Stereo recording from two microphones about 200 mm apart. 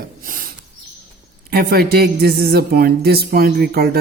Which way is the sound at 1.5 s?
50° right (ahead or behind).